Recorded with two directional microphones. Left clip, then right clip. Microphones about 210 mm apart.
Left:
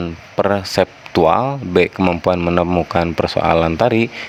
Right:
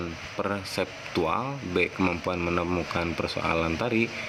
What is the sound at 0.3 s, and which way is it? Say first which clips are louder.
Speech: left 14 dB; 50° left (ahead or behind).